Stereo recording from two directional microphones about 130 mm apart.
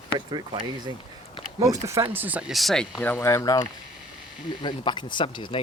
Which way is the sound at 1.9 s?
20° right (ahead or behind).